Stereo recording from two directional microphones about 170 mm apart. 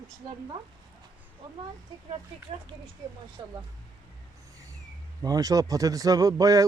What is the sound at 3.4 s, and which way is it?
Speech, 30° right (ahead or behind).